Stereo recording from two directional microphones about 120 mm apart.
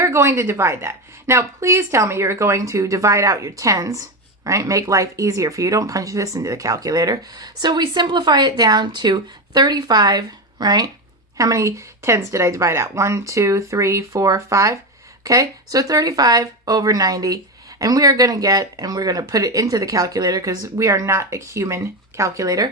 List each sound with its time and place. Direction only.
0.0 s speech: 25° right (ahead or behind)